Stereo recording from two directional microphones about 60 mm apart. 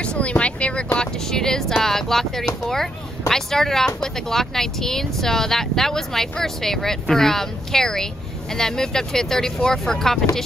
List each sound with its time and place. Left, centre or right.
0.0 s speech: centre